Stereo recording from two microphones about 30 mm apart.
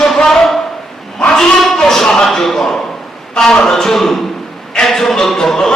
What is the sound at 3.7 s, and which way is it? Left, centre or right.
A man's voice, centre.